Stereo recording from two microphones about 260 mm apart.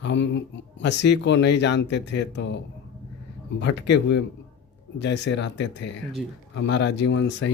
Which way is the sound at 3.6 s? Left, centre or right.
Left.